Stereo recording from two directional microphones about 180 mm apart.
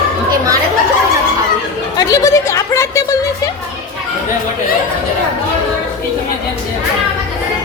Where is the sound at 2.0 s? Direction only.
20° left (ahead or behind).